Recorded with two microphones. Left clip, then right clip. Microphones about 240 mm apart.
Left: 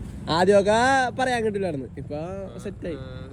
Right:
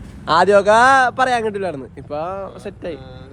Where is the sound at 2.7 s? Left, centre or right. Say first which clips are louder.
Right 5 dB; centre.